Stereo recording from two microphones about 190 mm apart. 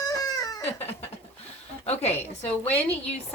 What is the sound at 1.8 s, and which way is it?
Speech, 35° left (ahead or behind).